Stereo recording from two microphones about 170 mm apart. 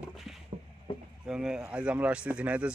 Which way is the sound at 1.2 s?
5° right (ahead or behind).